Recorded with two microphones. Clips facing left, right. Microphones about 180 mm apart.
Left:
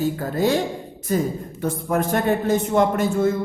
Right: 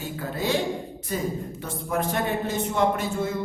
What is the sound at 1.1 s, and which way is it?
Speech, 45° left (ahead or behind).